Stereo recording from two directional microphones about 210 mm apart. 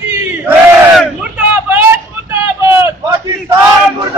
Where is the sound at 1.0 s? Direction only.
5° right (ahead or behind).